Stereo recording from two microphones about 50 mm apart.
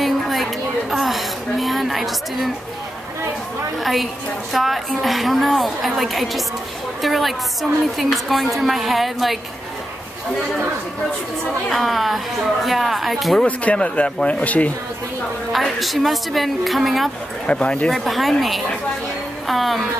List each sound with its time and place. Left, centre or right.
0.0 s a woman's voice: centre
3.8 s a woman's voice: centre
11.7 s a woman's voice: centre
13.5 s speech: left
15.5 s a woman's voice: centre
17.5 s speech: left
17.9 s a woman's voice: centre
19.4 s a woman's voice: centre